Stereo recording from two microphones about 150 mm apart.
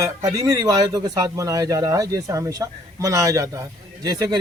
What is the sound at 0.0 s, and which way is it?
A man's voice, 25° right (ahead or behind).